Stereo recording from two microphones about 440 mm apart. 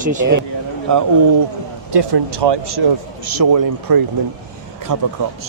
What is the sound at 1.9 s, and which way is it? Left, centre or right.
Speech, right.